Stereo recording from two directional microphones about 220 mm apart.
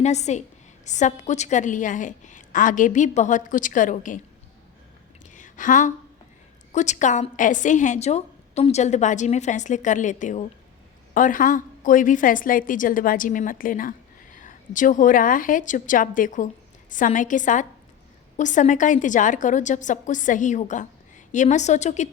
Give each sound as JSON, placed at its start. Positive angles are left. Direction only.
{"t": 0.0, "sound": "a woman's voice", "side_deg": 30}
{"t": 5.2, "sound": "a sound", "side_deg": 35}
{"t": 6.7, "sound": "a woman's voice", "side_deg": 35}